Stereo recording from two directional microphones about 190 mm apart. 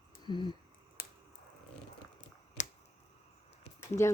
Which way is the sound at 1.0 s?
55° left (ahead or behind).